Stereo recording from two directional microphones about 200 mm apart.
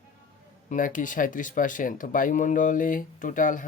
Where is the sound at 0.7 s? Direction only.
40° left (ahead or behind).